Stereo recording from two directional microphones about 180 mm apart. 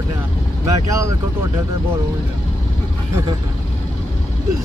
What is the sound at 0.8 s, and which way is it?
Speech, 20° right (ahead or behind).